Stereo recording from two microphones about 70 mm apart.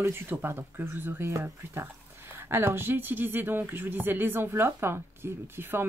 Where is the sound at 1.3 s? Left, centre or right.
Right.